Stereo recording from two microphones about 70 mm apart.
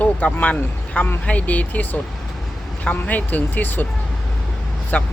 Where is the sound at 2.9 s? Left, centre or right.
Left.